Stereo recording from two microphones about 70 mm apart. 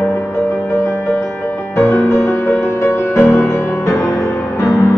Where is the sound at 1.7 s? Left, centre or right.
Left.